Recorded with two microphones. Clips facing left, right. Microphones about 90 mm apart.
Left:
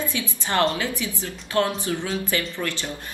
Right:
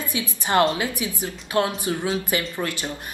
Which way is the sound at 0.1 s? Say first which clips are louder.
Right 3 dB; 20° right (ahead or behind).